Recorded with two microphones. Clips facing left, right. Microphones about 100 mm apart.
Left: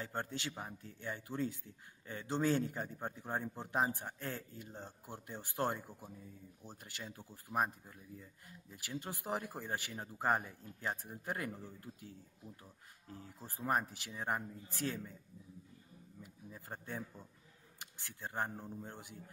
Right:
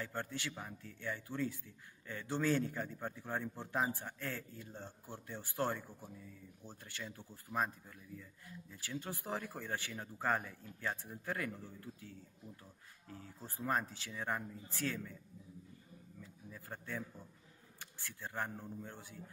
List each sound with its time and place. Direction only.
0.0 s a man's voice: 20° left (ahead or behind)
13.1 s a man's voice: 20° left (ahead or behind)
16.4 s a man's voice: 20° left (ahead or behind)